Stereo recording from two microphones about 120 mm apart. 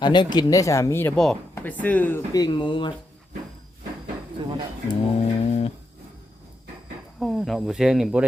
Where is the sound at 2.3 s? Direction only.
35° left (ahead or behind).